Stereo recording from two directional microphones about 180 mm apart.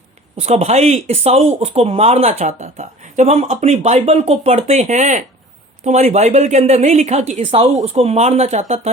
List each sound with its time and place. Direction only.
0.3 s speech: 35° right (ahead or behind)